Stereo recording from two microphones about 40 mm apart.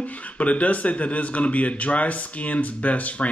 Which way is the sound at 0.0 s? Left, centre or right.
Left.